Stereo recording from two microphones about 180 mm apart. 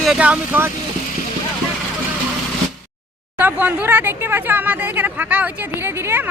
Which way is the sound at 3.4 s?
10° right (ahead or behind).